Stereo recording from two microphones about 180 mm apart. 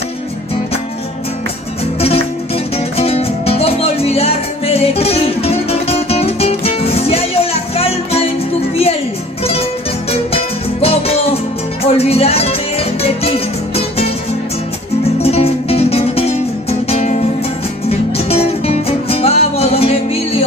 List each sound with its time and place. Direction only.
2.0 s music: 35° left (ahead or behind)
10.1 s music: 35° left (ahead or behind)
15.2 s music: 35° left (ahead or behind)